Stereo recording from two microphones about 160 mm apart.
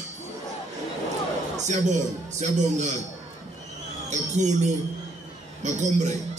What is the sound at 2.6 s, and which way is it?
Speech, 50° right (ahead or behind).